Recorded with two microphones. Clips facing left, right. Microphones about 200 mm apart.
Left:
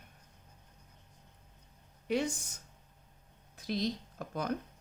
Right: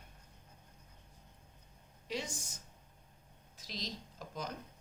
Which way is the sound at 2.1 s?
60° left (ahead or behind).